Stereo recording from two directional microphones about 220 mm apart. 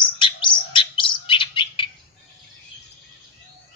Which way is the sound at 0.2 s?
20° left (ahead or behind).